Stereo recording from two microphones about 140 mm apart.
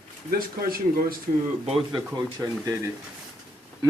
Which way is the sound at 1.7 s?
40° right (ahead or behind).